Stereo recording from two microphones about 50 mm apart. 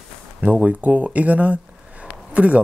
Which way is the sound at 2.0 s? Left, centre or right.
Right.